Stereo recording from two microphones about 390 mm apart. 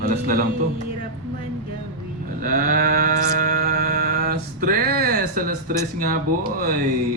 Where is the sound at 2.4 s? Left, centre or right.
Right.